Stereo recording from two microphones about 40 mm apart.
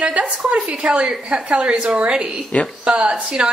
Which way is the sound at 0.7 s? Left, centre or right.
Right.